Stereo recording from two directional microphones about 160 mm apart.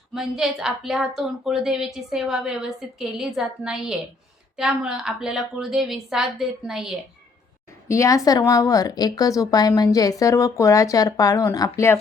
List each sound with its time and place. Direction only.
0.1 s a woman's voice: 5° right (ahead or behind)
7.9 s a woman's voice: 20° left (ahead or behind)